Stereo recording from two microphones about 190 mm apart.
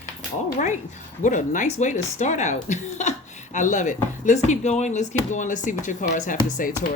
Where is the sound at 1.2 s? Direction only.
40° left (ahead or behind).